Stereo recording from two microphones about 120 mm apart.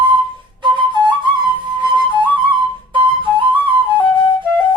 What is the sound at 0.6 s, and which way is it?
Flute, 45° right (ahead or behind).